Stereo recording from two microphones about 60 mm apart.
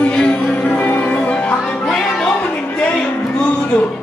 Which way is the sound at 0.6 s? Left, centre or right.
Left.